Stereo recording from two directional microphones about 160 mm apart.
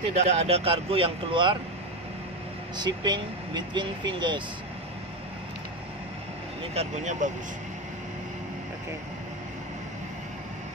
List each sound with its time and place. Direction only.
0.2 s speech: 40° right (ahead or behind)
2.8 s speech: 25° right (ahead or behind)
6.7 s speech: 45° right (ahead or behind)